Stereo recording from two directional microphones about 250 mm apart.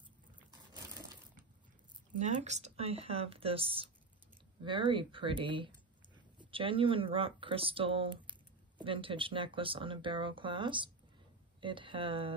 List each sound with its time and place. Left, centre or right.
2.1 s speech: right